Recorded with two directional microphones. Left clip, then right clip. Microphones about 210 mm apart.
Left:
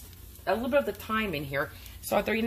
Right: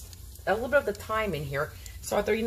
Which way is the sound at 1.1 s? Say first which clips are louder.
Right 1 dB; 35° left (ahead or behind).